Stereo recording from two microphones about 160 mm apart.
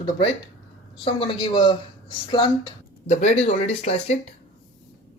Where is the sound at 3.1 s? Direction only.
45° left (ahead or behind).